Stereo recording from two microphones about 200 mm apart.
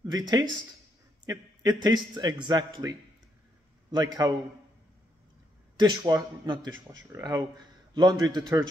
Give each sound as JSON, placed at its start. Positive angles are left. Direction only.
{"t": 0.0, "sound": "speech", "side_deg": -20}
{"t": 4.2, "sound": "speech", "side_deg": -20}
{"t": 5.8, "sound": "speech", "side_deg": -20}